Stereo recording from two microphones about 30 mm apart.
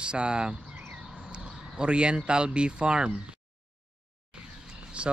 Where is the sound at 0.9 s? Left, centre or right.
Centre.